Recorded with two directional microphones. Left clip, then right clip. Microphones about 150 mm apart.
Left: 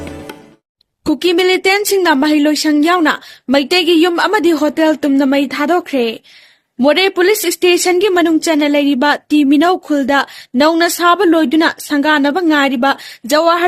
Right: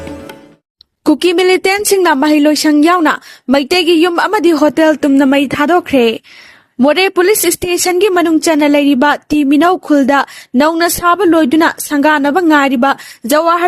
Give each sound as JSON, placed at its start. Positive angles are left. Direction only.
{"t": 1.0, "sound": "a woman's voice", "side_deg": -45}